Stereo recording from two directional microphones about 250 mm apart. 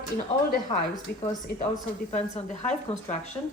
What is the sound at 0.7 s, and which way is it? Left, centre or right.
Speech, centre.